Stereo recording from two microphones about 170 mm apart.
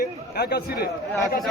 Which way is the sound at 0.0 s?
65° left (ahead or behind).